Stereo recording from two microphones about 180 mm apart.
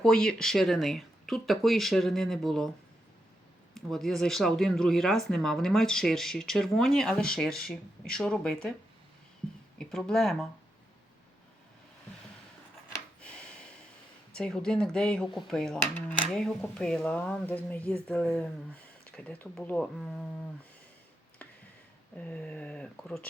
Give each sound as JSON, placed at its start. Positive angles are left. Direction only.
{"t": 0.0, "sound": "speech", "side_deg": 5}
{"t": 3.8, "sound": "speech", "side_deg": 0}
{"t": 9.7, "sound": "speech", "side_deg": 5}
{"t": 13.2, "sound": "gasp", "side_deg": 5}
{"t": 14.3, "sound": "speech", "side_deg": 5}
{"t": 22.2, "sound": "speech", "side_deg": 5}